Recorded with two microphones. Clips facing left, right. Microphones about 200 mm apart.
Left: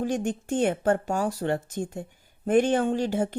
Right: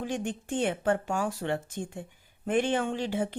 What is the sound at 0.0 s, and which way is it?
Speech, 45° left (ahead or behind).